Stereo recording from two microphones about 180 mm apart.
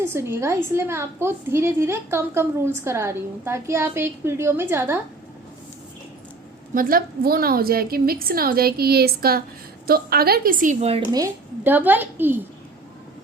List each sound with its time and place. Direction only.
0.0 s a woman's voice: 15° right (ahead or behind)
6.7 s a woman's voice: 55° right (ahead or behind); by 11.0 s 35° right (ahead or behind)
11.1 s a woman's voice: 15° right (ahead or behind)